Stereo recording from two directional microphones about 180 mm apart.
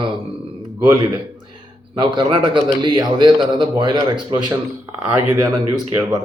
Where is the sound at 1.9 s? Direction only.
25° right (ahead or behind); by 5.5 s 10° right (ahead or behind).